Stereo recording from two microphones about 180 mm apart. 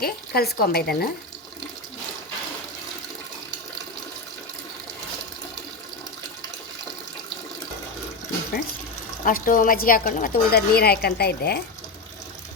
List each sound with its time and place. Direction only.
0.0 s speech: 60° left (ahead or behind)
9.2 s a woman's voice: 50° left (ahead or behind)